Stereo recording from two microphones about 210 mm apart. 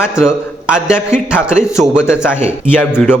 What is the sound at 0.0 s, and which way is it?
A man's voice, 5° right (ahead or behind).